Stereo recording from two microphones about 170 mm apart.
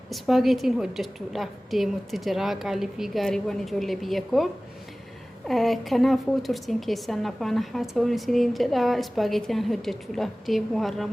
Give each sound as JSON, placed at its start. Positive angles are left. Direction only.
{"t": 0.1, "sound": "a woman's voice", "side_deg": 0}
{"t": 5.5, "sound": "a woman's voice", "side_deg": 0}